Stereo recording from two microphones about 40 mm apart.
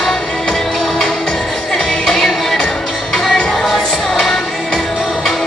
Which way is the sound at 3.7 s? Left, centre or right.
Centre.